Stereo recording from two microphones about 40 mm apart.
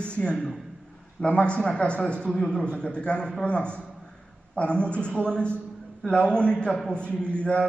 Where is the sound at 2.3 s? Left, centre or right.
Centre.